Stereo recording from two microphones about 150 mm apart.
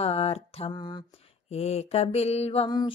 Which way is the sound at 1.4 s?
45° left (ahead or behind).